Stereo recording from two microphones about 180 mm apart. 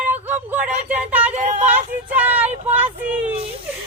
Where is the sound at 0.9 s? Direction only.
10° right (ahead or behind).